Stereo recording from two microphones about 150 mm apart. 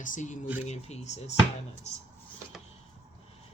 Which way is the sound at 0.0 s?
60° left (ahead or behind).